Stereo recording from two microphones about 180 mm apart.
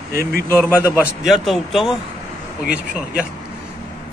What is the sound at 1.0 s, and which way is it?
Speech, centre (ahead or behind).